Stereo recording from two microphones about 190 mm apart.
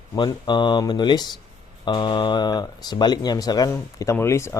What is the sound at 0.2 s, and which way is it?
Speech, 25° left (ahead or behind).